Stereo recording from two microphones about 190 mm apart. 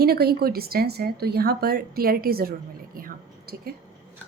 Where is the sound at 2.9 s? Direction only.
50° right (ahead or behind).